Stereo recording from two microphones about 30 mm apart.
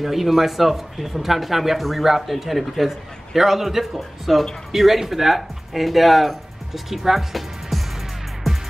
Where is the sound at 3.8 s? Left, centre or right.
Centre.